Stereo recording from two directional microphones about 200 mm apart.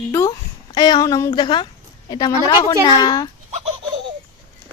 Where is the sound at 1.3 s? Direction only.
25° left (ahead or behind).